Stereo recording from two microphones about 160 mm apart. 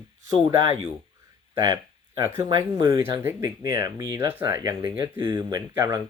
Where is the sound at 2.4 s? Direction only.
25° right (ahead or behind).